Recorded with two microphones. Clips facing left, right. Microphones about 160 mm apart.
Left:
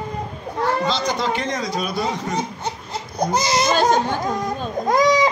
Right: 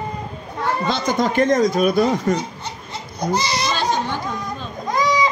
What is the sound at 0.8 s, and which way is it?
Speech, 50° right (ahead or behind).